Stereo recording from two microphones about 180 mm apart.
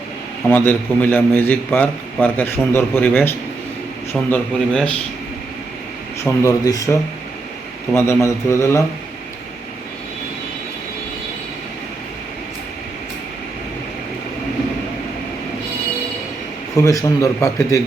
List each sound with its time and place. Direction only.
0.5 s a man's voice: 10° left (ahead or behind)
6.2 s a man's voice: 15° left (ahead or behind)
16.7 s a man's voice: 20° left (ahead or behind)